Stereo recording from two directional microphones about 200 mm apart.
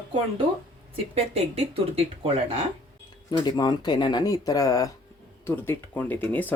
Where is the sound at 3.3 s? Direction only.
20° left (ahead or behind).